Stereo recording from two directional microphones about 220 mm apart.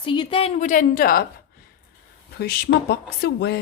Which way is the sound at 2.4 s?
45° left (ahead or behind).